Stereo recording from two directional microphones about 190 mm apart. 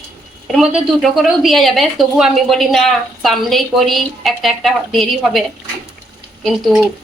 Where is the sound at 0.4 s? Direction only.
Centre (ahead or behind).